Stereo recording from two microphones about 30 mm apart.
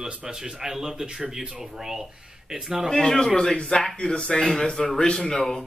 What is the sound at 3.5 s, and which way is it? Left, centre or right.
Speech, left.